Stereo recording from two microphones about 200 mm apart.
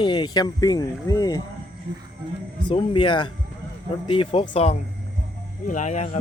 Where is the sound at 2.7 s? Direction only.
25° left (ahead or behind).